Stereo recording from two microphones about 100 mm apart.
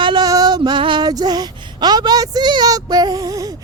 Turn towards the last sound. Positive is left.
turn(degrees=-40)  # may be behind; listen again after turning